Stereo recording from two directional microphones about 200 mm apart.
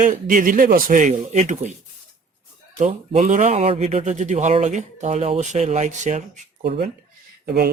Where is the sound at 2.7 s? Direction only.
35° right (ahead or behind).